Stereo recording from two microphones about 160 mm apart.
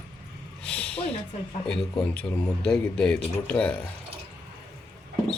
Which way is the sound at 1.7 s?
5° left (ahead or behind).